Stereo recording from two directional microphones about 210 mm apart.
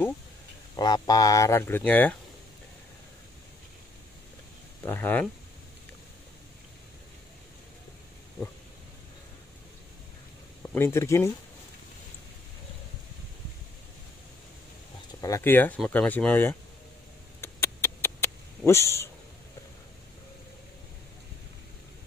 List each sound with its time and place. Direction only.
0.7 s speech: 20° left (ahead or behind)
4.8 s speech: 10° left (ahead or behind)
10.7 s speech: 10° left (ahead or behind)
15.1 s speech: 15° left (ahead or behind)
17.4 s a sound: 10° left (ahead or behind)
18.7 s speech: 10° left (ahead or behind)